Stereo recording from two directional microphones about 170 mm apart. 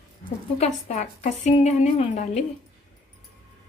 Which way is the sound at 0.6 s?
45° left (ahead or behind).